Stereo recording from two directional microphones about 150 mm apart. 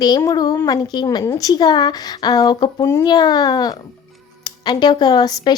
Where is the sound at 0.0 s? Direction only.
25° left (ahead or behind).